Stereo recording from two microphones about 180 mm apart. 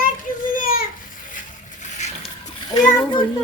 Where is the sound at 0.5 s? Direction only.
50° left (ahead or behind).